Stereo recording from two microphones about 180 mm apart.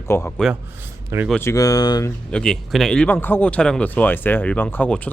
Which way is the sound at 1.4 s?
15° left (ahead or behind).